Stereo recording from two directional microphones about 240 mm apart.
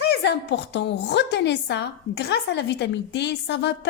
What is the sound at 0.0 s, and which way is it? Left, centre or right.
A woman's voice, left.